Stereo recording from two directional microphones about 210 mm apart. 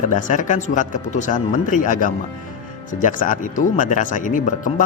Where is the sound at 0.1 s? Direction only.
35° left (ahead or behind).